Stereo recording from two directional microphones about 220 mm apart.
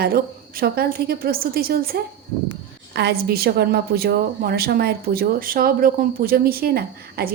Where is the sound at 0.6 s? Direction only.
45° right (ahead or behind).